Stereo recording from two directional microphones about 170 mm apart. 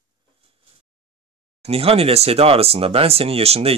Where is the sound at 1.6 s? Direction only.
35° right (ahead or behind).